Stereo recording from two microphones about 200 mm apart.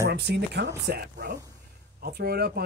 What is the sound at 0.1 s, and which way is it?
Speech, 55° right (ahead or behind).